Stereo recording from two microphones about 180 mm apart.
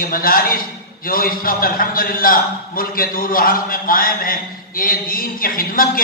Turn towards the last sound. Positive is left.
turn(degrees=50)  # may be behind; listen again after turning